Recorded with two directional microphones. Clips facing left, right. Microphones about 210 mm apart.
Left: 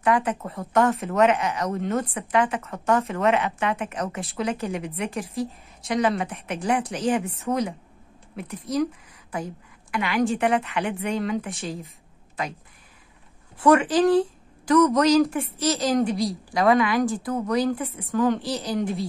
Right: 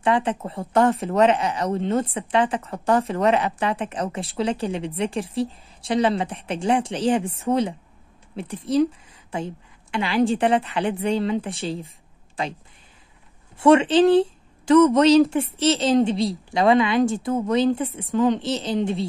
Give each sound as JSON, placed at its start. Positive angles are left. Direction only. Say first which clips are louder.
{"t": 0.0, "sound": "a woman's voice", "louder": "right 1 dB", "side_deg": -30}
{"t": 13.6, "sound": "speech", "louder": "right 3 dB", "side_deg": -25}